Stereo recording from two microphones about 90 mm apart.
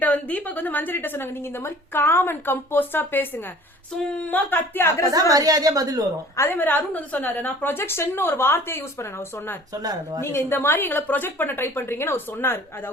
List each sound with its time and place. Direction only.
0.0 s a woman's voice: 15° left (ahead or behind)
5.1 s speech: 45° right (ahead or behind)
6.3 s a woman's voice: 25° left (ahead or behind)
10.2 s a woman's voice: 30° left (ahead or behind)